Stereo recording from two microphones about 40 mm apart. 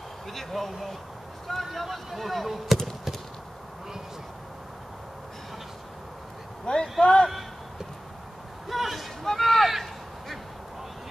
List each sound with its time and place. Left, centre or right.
0.3 s speech: centre
6.6 s speech: left
8.6 s a sound: centre